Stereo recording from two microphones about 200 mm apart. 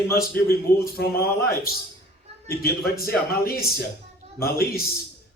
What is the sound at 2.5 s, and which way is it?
A man's voice, 50° left (ahead or behind).